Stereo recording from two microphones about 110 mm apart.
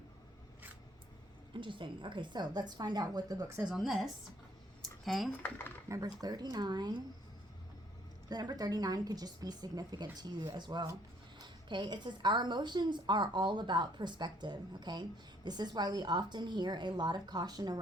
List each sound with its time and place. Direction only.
1.5 s a woman's voice: 50° right (ahead or behind); by 3.6 s 30° right (ahead or behind)
3.6 s a woman's voice: 5° right (ahead or behind)
4.8 s a sound: centre (ahead or behind)
5.4 s speech: 15° left (ahead or behind)
6.2 s a woman's voice: 40° right (ahead or behind)
8.3 s a woman's voice: 40° right (ahead or behind)